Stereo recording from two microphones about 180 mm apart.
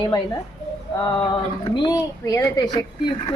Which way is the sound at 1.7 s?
25° left (ahead or behind).